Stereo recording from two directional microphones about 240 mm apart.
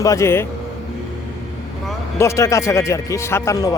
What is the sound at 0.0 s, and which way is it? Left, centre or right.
Speech, centre.